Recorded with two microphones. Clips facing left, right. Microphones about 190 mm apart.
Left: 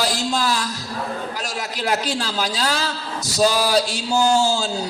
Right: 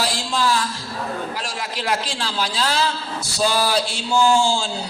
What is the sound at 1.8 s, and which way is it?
A man's voice, 40° left (ahead or behind).